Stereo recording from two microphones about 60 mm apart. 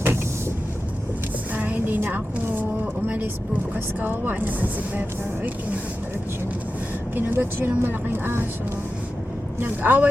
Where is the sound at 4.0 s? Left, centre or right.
Right.